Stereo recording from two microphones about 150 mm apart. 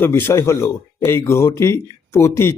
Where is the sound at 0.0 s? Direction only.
15° left (ahead or behind).